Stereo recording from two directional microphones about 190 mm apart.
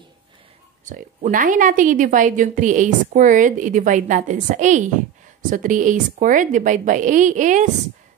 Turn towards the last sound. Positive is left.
turn(degrees=-40)  # may be behind; listen again after turning